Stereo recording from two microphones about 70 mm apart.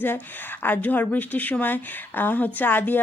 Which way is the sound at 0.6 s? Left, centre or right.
Left.